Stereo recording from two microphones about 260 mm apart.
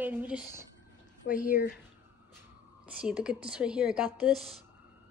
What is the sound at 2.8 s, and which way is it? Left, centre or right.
A woman's voice, centre.